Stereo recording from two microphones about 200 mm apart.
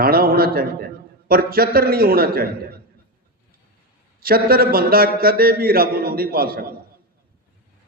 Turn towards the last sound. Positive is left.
turn(degrees=-50)  # may be behind; listen again after turning